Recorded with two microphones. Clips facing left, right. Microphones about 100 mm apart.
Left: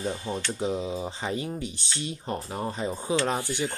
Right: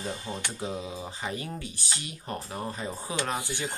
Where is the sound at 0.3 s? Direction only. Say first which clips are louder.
Left 5 dB; 20° left (ahead or behind).